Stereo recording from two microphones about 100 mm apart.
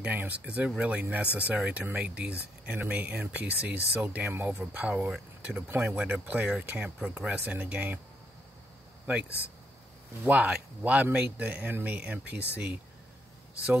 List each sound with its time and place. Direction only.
0.0 s speech: 15° right (ahead or behind)
10.2 s speech: 15° right (ahead or behind)